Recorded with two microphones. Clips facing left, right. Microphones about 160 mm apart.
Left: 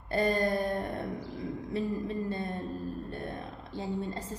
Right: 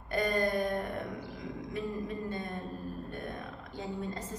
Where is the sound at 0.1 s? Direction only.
30° left (ahead or behind).